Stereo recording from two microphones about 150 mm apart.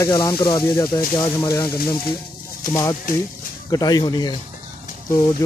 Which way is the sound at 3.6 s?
25° left (ahead or behind).